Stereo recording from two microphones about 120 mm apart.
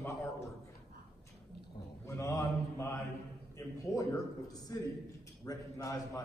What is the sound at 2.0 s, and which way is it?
A man's voice, 25° left (ahead or behind).